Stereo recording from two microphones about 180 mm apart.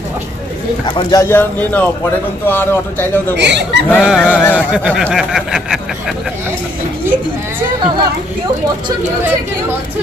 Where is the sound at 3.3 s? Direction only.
75° right (ahead or behind).